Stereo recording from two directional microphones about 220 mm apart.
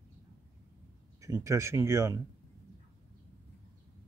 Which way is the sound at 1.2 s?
15° right (ahead or behind).